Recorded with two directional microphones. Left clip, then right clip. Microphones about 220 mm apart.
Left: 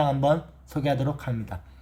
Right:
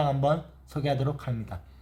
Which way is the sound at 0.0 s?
5° left (ahead or behind).